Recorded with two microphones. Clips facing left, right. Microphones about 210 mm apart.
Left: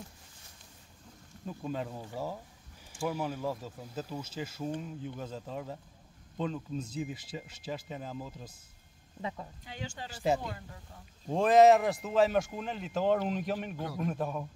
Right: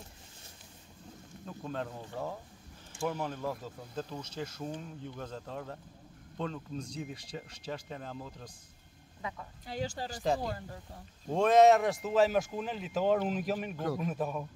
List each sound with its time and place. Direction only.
1.6 s speech: 10° left (ahead or behind)
9.7 s speech: 40° right (ahead or behind)
11.2 s speech: centre (ahead or behind)